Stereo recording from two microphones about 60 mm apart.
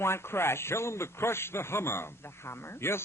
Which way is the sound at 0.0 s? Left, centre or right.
Left.